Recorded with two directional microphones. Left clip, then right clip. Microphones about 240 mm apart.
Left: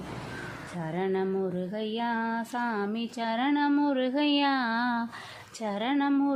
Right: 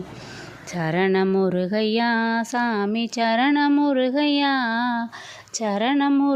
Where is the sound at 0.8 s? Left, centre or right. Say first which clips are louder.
Right 9 dB; right.